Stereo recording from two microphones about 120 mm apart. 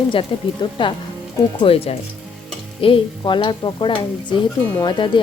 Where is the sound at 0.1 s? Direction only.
45° left (ahead or behind).